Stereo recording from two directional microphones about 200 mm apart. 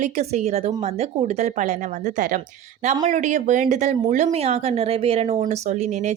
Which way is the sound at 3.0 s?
35° right (ahead or behind).